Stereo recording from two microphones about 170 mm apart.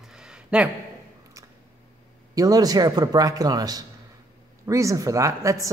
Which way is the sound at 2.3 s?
20° right (ahead or behind).